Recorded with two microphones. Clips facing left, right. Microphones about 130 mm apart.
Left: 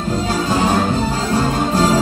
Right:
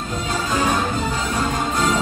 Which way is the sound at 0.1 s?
30° left (ahead or behind).